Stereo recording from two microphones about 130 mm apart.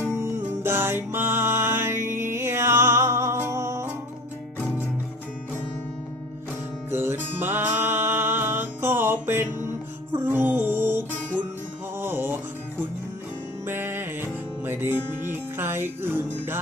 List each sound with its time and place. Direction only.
0.1 s music: 20° right (ahead or behind)
6.9 s music: 20° right (ahead or behind)
13.7 s music: 15° right (ahead or behind)